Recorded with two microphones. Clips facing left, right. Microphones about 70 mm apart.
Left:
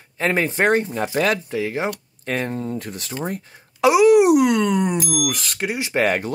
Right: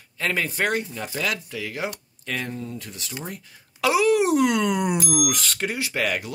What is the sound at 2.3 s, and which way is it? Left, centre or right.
Speech, left.